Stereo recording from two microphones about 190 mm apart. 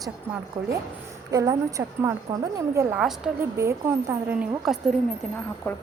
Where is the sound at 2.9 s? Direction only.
5° right (ahead or behind).